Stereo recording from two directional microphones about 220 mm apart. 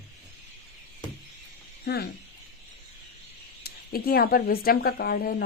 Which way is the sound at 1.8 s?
45° left (ahead or behind).